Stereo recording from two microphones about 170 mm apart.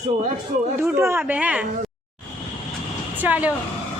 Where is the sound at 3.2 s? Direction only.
10° right (ahead or behind).